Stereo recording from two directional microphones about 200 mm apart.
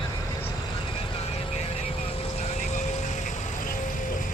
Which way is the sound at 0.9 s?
30° left (ahead or behind).